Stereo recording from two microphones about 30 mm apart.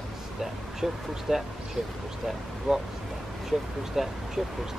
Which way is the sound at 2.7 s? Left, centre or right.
Centre.